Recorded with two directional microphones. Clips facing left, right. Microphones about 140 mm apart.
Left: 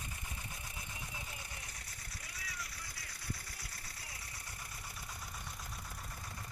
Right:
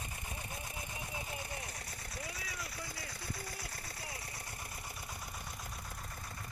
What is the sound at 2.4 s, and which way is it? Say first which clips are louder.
Vehicle: right 4 dB; 25° right (ahead or behind).